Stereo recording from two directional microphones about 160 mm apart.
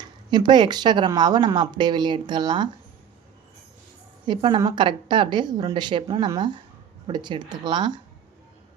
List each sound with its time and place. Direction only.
0.0 s a woman's voice: 30° right (ahead or behind)
4.3 s a woman's voice: 30° right (ahead or behind)